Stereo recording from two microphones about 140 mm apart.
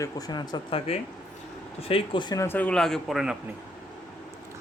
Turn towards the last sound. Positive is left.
turn(degrees=0)  # may be behind; listen again after turning